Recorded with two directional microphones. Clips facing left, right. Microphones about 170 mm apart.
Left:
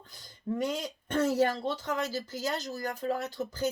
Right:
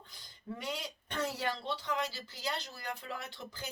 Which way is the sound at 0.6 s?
45° left (ahead or behind).